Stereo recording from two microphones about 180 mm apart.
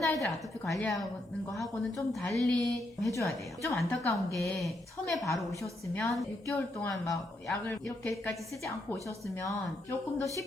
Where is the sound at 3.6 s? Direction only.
15° left (ahead or behind).